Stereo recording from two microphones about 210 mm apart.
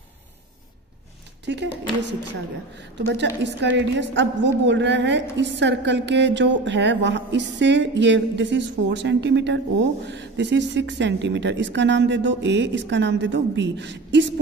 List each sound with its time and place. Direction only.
1.4 s speech: 55° right (ahead or behind)
3.6 s speech: 55° right (ahead or behind)